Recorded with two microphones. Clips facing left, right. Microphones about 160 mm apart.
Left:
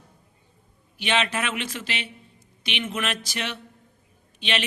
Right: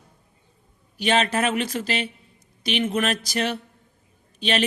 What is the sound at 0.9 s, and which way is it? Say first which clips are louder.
A man's voice: right 4 dB; 40° right (ahead or behind).